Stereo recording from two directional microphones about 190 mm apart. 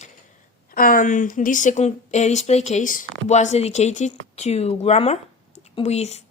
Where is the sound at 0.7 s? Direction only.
45° left (ahead or behind).